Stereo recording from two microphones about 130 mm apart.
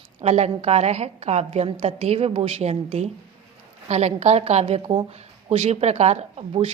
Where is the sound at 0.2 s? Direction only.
55° right (ahead or behind).